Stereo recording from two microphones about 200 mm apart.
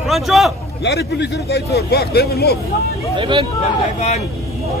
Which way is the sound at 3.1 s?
25° right (ahead or behind).